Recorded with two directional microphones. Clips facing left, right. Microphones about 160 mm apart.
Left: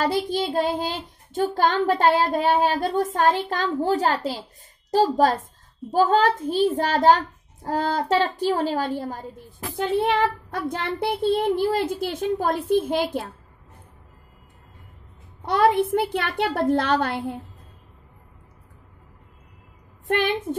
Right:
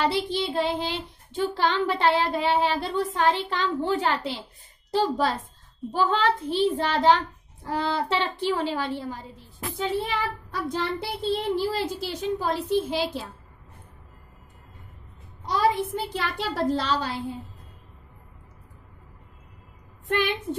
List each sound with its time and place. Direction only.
0.0 s a child's voice: 45° left (ahead or behind)
15.4 s a child's voice: 60° left (ahead or behind)
20.1 s a child's voice: 50° left (ahead or behind)